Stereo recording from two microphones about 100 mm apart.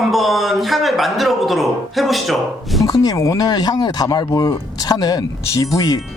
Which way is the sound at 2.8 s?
35° left (ahead or behind).